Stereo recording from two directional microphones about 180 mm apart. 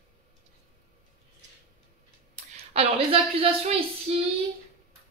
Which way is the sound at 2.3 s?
35° right (ahead or behind).